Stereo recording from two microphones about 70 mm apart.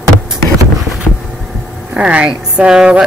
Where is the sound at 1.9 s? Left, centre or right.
Centre.